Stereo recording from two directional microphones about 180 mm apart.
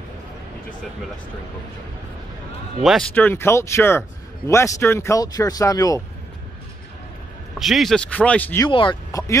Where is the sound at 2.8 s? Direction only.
Centre (ahead or behind); by 6.0 s 20° left (ahead or behind).